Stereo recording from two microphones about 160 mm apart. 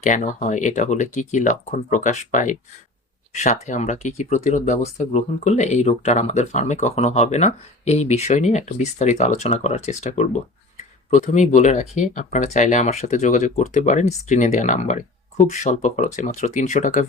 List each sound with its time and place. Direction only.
0.0 s speech: 50° left (ahead or behind)